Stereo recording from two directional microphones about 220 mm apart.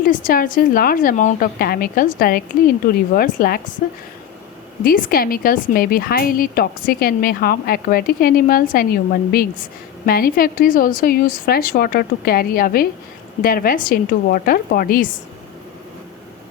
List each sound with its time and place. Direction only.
0.0 s speech: 40° left (ahead or behind)
4.8 s speech: 40° left (ahead or behind)